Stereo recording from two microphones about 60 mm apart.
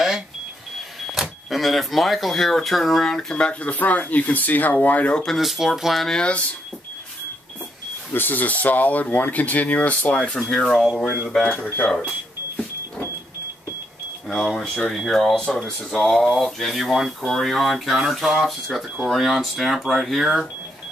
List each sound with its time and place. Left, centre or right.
1.5 s speech: centre; by 5.1 s left
5.1 s speech: centre
6.0 s speech: centre
8.1 s speech: left; by 10.8 s centre
10.8 s speech: centre
11.4 s speech: left
14.3 s speech: centre